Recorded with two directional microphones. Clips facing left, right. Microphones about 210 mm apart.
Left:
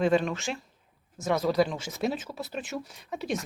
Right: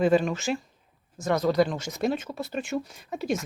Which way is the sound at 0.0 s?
Centre (ahead or behind).